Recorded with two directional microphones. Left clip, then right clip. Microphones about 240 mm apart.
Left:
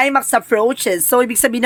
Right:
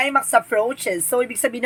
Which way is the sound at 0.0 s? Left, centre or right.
Left.